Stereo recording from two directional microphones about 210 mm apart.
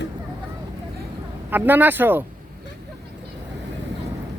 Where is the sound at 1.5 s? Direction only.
10° right (ahead or behind).